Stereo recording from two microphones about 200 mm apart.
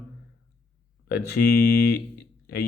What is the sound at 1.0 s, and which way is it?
Speech, 50° left (ahead or behind).